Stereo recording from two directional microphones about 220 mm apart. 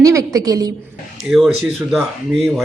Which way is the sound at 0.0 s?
15° right (ahead or behind).